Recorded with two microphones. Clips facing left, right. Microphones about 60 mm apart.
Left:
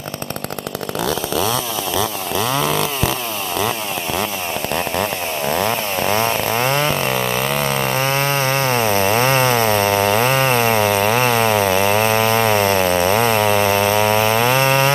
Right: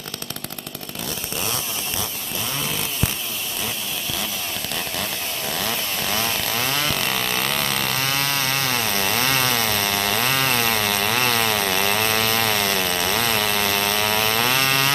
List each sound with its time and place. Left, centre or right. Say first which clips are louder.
2.5 s chainsaw: left 9 dB; left
5.5 s chainsaw: left 8 dB; left